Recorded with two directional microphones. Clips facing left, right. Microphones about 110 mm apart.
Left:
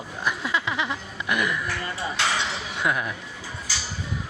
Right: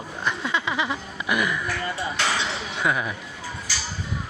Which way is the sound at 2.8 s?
Centre (ahead or behind).